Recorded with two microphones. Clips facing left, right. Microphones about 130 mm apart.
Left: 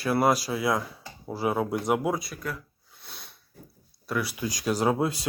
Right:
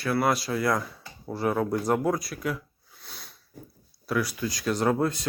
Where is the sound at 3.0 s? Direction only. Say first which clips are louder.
Right 1 dB; centre (ahead or behind).